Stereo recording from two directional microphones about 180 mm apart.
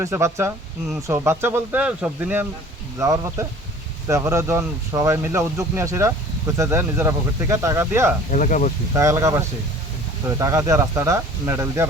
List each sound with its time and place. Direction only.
0.0 s speech: 15° right (ahead or behind)
8.3 s speech: 45° left (ahead or behind)
8.9 s speech: 15° right (ahead or behind)